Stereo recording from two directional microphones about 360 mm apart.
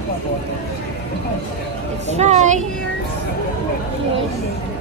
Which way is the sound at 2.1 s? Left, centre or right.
Centre.